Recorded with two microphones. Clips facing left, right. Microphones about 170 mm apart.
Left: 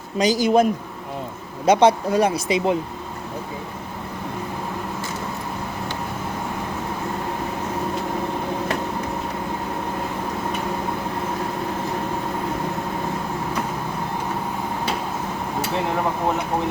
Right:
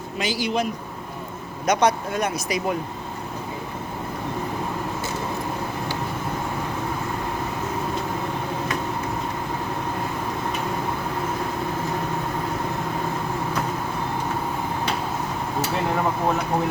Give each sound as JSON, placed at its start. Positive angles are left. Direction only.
{"t": 0.2, "sound": "speech", "side_deg": 40}
{"t": 1.6, "sound": "speech", "side_deg": 25}